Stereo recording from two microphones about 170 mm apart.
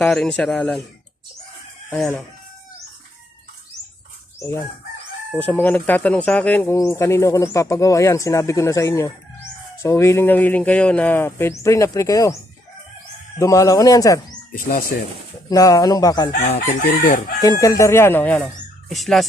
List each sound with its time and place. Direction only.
0.0 s speech: 5° left (ahead or behind)
1.9 s speech: 5° left (ahead or behind)
5.4 s speech: 10° left (ahead or behind)
13.4 s speech: 20° left (ahead or behind)
14.5 s chicken: 55° left (ahead or behind)
15.4 s speech: 20° left (ahead or behind)
16.4 s chicken: 75° left (ahead or behind); by 17.3 s 55° left (ahead or behind)
17.4 s speech: 20° left (ahead or behind); by 19.3 s centre (ahead or behind)